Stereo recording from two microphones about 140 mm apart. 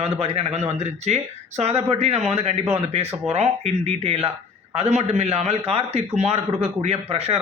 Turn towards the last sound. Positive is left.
turn(degrees=-45)  # may be behind; listen again after turning